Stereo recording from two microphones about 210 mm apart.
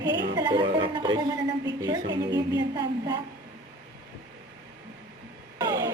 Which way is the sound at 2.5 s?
20° right (ahead or behind).